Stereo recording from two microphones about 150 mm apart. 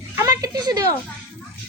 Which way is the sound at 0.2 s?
25° right (ahead or behind).